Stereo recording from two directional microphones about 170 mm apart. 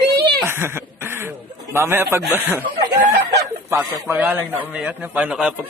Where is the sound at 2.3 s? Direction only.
15° right (ahead or behind).